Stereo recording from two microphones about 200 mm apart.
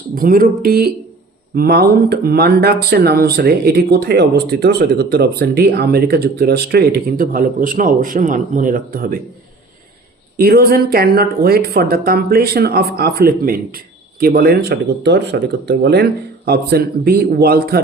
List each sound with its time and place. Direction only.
0.1 s speech: 45° right (ahead or behind)
10.3 s speech: 50° right (ahead or behind)